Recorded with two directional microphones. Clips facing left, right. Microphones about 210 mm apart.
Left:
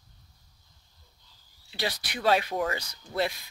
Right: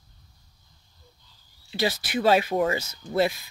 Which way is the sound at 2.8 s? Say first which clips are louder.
Right 8 dB; 25° right (ahead or behind).